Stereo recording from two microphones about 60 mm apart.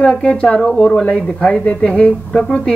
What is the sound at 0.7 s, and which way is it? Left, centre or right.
Speech, centre.